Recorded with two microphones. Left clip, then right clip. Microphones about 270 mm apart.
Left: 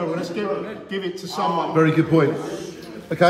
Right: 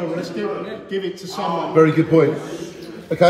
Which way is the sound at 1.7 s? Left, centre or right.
Centre.